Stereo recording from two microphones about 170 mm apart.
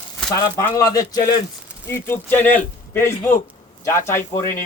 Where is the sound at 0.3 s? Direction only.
20° left (ahead or behind).